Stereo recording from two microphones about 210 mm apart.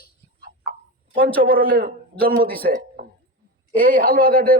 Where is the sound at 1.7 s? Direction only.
45° right (ahead or behind).